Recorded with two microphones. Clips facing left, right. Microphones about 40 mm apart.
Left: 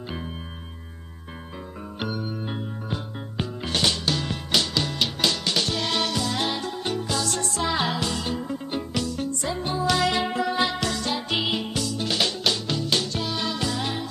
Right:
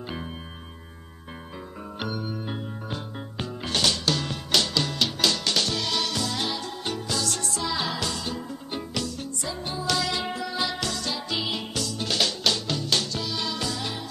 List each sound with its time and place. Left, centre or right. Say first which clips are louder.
2.0 s music: left 1 dB; centre
5.8 s music: left 2 dB; left
6.1 s music: left 3 dB; centre
7.5 s music: left 5 dB; left
8.0 s music: left 3 dB; left
8.7 s music: left 2 dB; centre
9.9 s music: left 5 dB; left
10.8 s music: left 3 dB; centre
11.1 s music: left 3 dB; left
11.5 s music: left 3 dB; centre
13.1 s music: left 2 dB; left